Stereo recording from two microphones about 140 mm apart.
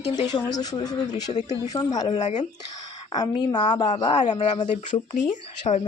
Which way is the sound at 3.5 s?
30° left (ahead or behind).